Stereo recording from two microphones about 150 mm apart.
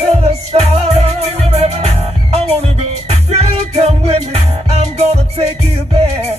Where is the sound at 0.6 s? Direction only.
45° right (ahead or behind).